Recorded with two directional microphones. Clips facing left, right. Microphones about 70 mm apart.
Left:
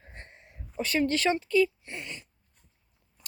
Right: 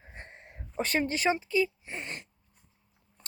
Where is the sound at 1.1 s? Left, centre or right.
Centre.